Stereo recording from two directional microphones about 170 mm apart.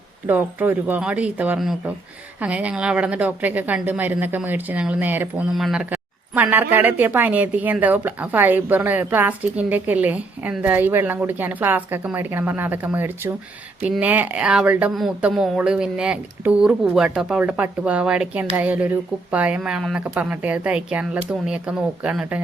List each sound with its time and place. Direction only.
0.3 s speech: 10° right (ahead or behind)